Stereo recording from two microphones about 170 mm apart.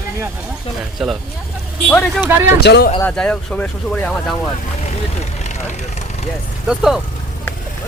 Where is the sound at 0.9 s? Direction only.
Centre (ahead or behind).